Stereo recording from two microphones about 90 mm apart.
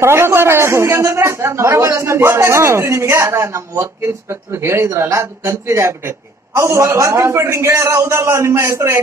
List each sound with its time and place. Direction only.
0.0 s a man's voice: 30° right (ahead or behind)